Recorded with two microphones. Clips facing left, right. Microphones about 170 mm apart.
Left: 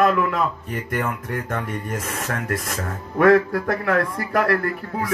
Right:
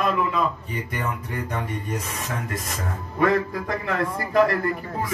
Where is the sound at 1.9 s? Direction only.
55° left (ahead or behind).